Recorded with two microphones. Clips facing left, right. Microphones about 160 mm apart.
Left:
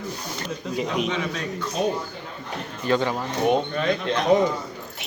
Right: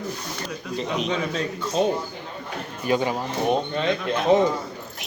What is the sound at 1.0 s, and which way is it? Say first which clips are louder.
Speech: right 1 dB; 35° right (ahead or behind).